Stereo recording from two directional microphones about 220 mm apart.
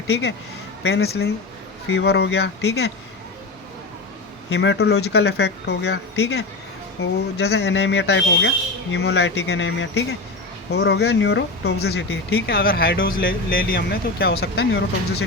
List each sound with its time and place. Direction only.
0.1 s speech: 50° left (ahead or behind)
4.4 s speech: 55° left (ahead or behind)